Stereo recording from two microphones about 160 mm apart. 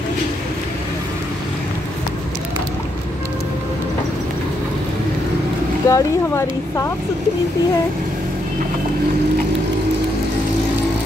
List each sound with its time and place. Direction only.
5.9 s speech: 20° left (ahead or behind)